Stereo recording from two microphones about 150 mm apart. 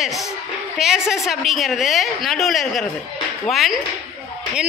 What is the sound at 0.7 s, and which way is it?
A woman's voice, 5° right (ahead or behind).